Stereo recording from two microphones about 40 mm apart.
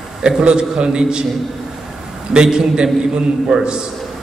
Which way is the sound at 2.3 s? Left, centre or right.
Centre.